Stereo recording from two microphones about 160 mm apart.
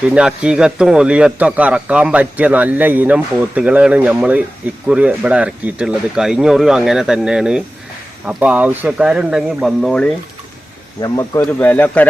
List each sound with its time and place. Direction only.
0.1 s a man's voice: 5° right (ahead or behind)
11.0 s speech: 20° left (ahead or behind)
11.6 s speech: 10° left (ahead or behind)